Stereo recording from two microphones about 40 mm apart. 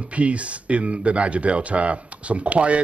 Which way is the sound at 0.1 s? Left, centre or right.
Right.